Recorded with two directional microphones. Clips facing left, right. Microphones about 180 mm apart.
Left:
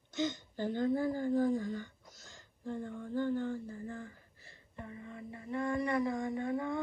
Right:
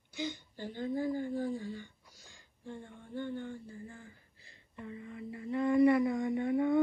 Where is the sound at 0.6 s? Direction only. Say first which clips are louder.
Left 4 dB; 45° left (ahead or behind).